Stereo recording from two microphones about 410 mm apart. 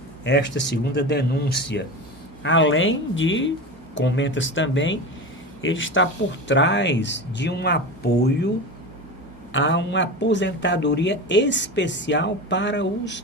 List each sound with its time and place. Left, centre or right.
0.3 s speech: left
9.5 s speech: left